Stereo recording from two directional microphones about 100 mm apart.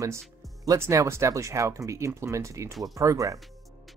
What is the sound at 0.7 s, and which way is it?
Speech, 30° right (ahead or behind).